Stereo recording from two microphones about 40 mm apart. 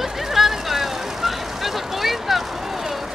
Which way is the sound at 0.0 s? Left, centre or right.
Centre.